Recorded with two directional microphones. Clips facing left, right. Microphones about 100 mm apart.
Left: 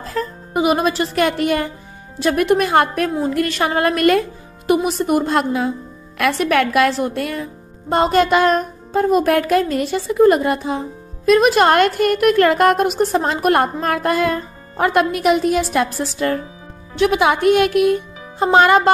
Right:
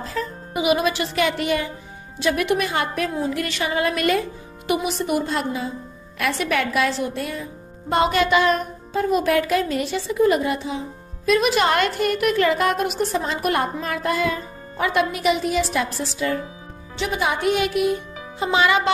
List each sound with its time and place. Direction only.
0.0 s speech: 45° left (ahead or behind)
5.3 s a woman's voice: 65° left (ahead or behind)
7.9 s speech: 40° left (ahead or behind)
16.9 s a woman's voice: 65° left (ahead or behind)
18.4 s speech: 50° left (ahead or behind)